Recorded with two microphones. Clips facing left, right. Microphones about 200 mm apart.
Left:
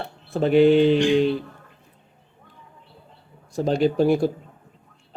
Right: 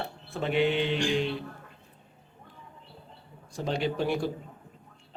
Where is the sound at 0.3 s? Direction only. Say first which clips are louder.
Left 11 dB; 40° left (ahead or behind).